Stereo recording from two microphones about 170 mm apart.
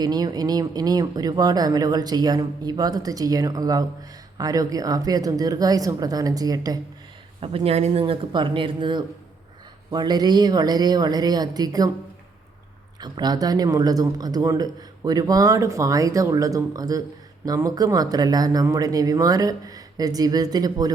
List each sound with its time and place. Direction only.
0.0 s a man's voice: 25° right (ahead or behind)
7.3 s a man's voice: 35° right (ahead or behind)
13.0 s a man's voice: 25° right (ahead or behind)